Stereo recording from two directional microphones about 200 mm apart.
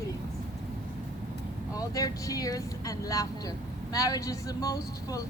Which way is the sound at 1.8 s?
15° left (ahead or behind).